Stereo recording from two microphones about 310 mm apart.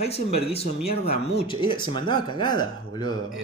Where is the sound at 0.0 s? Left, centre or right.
Centre.